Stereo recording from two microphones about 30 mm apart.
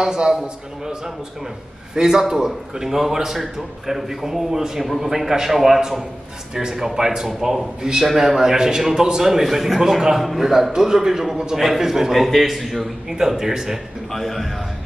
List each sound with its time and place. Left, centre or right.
0.0 s a man's voice: centre
2.0 s a man's voice: centre
8.0 s a man's voice: centre
13.1 s a man's voice: centre
14.1 s a man's voice: centre